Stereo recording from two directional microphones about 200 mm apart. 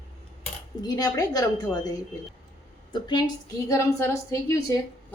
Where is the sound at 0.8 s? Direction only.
20° left (ahead or behind).